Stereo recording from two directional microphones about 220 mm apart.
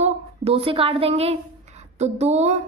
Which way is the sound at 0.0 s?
25° right (ahead or behind).